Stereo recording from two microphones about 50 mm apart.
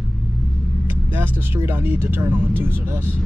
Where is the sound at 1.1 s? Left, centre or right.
Right.